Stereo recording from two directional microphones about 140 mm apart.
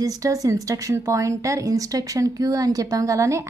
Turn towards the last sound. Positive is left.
turn(degrees=-20)  # may be behind; listen again after turning